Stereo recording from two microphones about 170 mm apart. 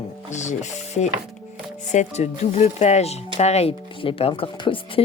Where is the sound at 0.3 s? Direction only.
45° left (ahead or behind).